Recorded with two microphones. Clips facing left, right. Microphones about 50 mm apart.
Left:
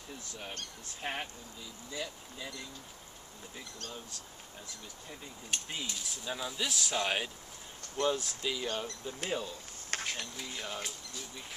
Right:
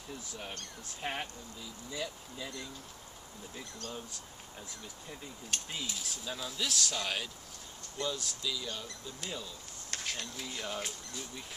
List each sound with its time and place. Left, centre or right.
1.0 s speech: centre
5.1 s speech: centre
7.0 s speech: left
8.0 s speech: left
10.0 s speech: centre